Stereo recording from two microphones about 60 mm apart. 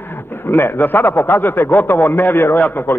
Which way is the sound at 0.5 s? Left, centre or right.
Left.